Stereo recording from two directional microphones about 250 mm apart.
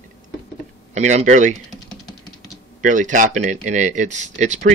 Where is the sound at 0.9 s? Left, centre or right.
Right.